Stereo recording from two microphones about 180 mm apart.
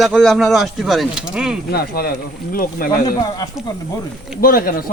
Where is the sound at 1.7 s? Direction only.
60° left (ahead or behind).